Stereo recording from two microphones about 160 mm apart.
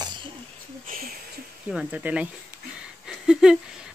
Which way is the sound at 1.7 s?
5° right (ahead or behind).